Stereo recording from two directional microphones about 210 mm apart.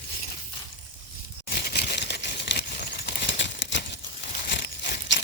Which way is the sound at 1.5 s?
50° left (ahead or behind).